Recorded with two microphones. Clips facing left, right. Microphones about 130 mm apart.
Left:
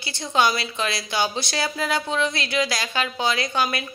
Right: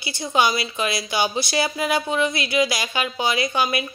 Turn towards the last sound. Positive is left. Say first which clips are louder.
# right 2 dB
turn(degrees=-5)  # may be behind; listen again after turning